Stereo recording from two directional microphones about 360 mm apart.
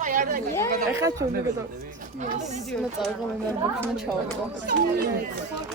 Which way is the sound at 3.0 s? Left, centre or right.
Centre.